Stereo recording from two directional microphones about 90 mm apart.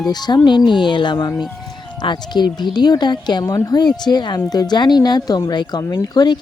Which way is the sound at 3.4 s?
40° left (ahead or behind).